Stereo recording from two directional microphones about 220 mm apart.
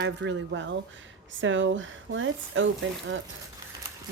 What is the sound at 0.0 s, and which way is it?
Speech, 55° right (ahead or behind).